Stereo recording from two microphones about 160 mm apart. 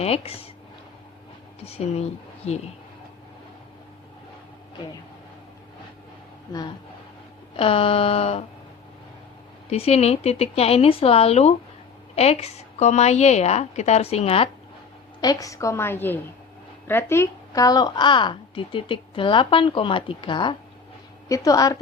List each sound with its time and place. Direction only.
0.0 s a woman's voice: 40° left (ahead or behind)
1.6 s a woman's voice: 40° left (ahead or behind)
7.5 s a woman's voice: 35° left (ahead or behind)
9.6 s a woman's voice: 40° left (ahead or behind)
15.2 s a woman's voice: 20° left (ahead or behind)